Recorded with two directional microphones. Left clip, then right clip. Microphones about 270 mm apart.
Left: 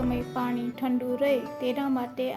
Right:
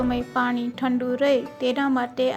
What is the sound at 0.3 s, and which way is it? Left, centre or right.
Speech, centre.